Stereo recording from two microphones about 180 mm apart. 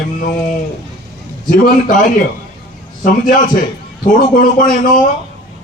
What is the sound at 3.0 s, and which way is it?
Speech, 50° left (ahead or behind).